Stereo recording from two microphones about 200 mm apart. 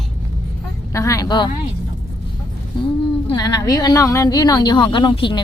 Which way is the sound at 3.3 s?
15° left (ahead or behind).